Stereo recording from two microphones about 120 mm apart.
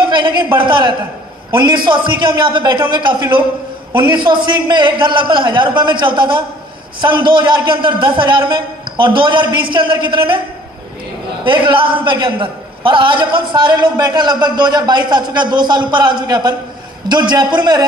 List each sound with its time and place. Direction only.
0.0 s a sound: 40° right (ahead or behind)
0.6 s a woman's voice: 40° right (ahead or behind)
11.4 s a man's voice: 45° right (ahead or behind)